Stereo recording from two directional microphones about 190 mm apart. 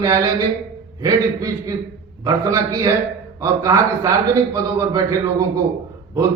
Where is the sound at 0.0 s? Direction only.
20° right (ahead or behind).